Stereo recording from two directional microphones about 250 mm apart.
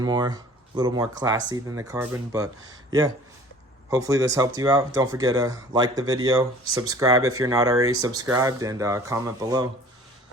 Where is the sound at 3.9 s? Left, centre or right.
Centre.